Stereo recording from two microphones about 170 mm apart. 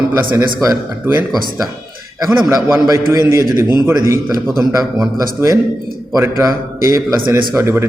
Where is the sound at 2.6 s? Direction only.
20° right (ahead or behind).